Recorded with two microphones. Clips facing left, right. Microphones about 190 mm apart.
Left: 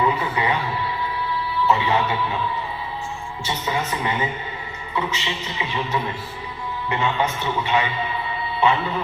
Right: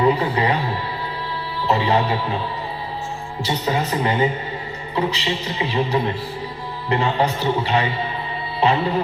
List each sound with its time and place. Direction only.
0.0 s speech: 35° right (ahead or behind)
3.4 s speech: 35° right (ahead or behind)